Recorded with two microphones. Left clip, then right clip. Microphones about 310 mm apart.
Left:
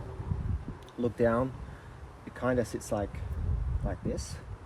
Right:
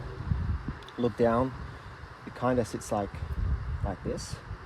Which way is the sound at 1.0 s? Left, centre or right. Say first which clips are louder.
Right 2 dB; right.